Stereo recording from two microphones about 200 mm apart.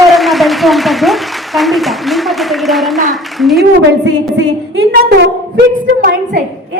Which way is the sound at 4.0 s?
60° right (ahead or behind).